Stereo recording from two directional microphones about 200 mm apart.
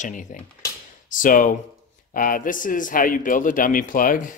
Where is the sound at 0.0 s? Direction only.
40° left (ahead or behind).